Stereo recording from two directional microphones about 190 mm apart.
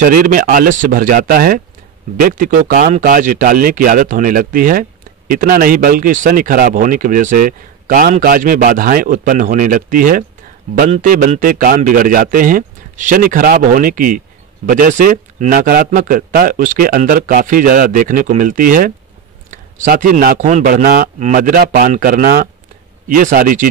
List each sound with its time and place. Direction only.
0.0 s a man's voice: 45° right (ahead or behind)